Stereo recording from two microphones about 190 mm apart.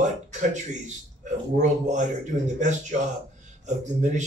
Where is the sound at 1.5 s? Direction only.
40° right (ahead or behind).